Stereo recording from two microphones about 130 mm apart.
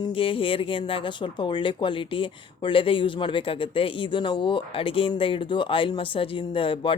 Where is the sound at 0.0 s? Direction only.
45° left (ahead or behind).